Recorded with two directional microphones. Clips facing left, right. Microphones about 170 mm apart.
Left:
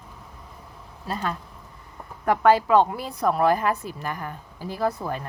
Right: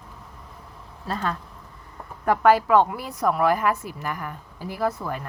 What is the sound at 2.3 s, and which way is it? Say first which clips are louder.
A woman's voice: even; 20° left (ahead or behind).